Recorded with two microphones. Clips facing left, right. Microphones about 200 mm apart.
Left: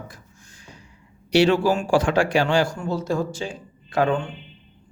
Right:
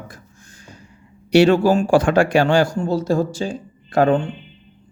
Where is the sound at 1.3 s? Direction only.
50° right (ahead or behind).